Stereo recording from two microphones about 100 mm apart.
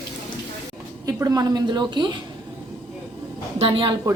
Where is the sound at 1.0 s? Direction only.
40° right (ahead or behind).